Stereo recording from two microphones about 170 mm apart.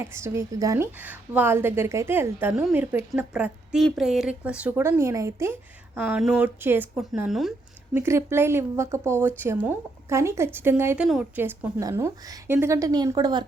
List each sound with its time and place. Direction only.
0.0 s a woman's voice: 15° right (ahead or behind)
7.1 s speech: centre (ahead or behind)
7.9 s a woman's voice: 15° right (ahead or behind)